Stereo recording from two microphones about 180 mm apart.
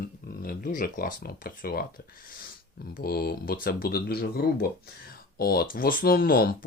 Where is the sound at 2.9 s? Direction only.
60° left (ahead or behind).